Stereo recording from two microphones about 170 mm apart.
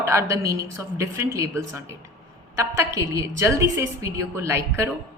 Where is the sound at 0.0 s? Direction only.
15° right (ahead or behind).